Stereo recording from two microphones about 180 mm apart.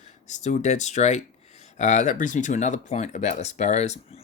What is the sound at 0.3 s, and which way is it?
Speech, 40° left (ahead or behind).